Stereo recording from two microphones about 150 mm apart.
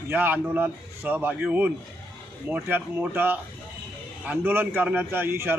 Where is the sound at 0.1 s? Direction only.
10° right (ahead or behind).